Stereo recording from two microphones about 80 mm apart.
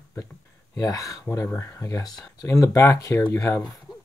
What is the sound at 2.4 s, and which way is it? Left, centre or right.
Speech, left.